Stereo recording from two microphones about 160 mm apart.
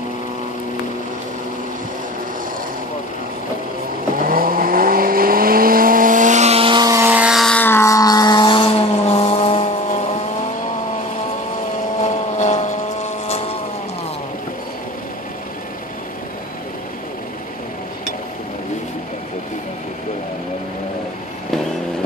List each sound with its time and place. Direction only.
4.2 s vehicle: 65° right (ahead or behind); by 7.5 s 5° right (ahead or behind)
7.5 s vehicle: 15° left (ahead or behind); by 9.9 s 40° left (ahead or behind)
12.0 s vehicle: 45° left (ahead or behind)